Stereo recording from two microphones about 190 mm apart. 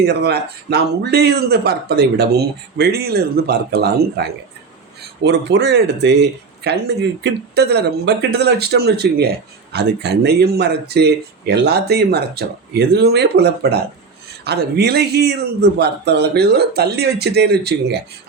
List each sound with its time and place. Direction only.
0.0 s speech: 60° right (ahead or behind)